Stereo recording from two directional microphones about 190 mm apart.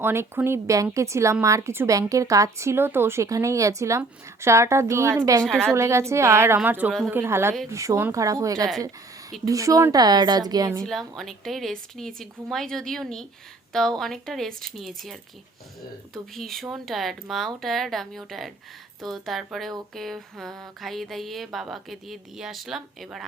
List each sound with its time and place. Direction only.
0.0 s speech: 10° right (ahead or behind)
5.4 s mantra: 5° left (ahead or behind)
5.7 s a woman's voice: 15° right (ahead or behind)
10.8 s mantra: centre (ahead or behind)